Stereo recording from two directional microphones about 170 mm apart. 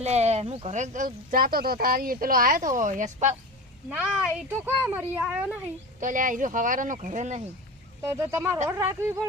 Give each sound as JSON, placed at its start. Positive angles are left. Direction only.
{"t": 0.0, "sound": "speech", "side_deg": -40}
{"t": 3.8, "sound": "speech", "side_deg": -5}
{"t": 6.0, "sound": "speech", "side_deg": -50}
{"t": 8.1, "sound": "speech", "side_deg": -15}